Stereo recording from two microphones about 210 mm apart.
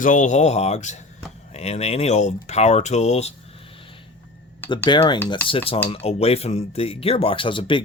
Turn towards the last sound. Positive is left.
turn(degrees=25)  # may be behind; listen again after turning